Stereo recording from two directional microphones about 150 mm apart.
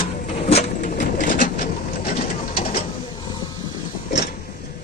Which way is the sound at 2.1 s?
90° left.